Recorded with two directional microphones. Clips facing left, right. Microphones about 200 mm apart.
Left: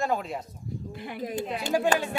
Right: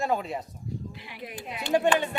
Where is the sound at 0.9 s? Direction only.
50° left (ahead or behind).